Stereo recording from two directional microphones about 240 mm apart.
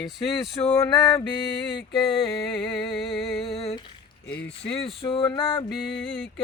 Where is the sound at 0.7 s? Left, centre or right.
Centre.